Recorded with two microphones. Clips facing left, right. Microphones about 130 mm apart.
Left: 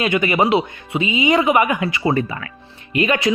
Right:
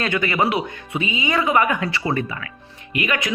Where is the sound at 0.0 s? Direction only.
20° left (ahead or behind).